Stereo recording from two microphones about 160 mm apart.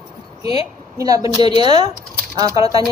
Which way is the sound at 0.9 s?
20° right (ahead or behind).